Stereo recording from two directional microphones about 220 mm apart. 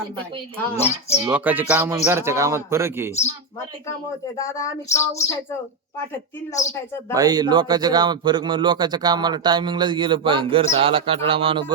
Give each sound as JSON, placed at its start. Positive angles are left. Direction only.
{"t": 1.2, "sound": "a man's voice", "side_deg": -10}
{"t": 4.5, "sound": "speech", "side_deg": 15}
{"t": 7.1, "sound": "speech", "side_deg": -15}